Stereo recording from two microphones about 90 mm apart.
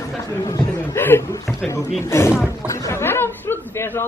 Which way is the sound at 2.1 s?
30° left (ahead or behind).